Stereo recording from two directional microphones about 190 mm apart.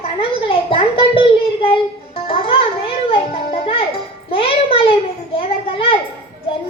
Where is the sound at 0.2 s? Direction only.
30° left (ahead or behind).